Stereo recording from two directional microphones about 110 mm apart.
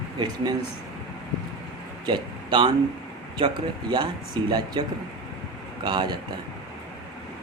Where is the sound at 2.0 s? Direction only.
50° right (ahead or behind).